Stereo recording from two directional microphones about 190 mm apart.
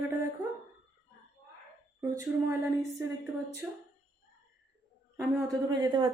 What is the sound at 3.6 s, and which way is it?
Speech, 5° right (ahead or behind).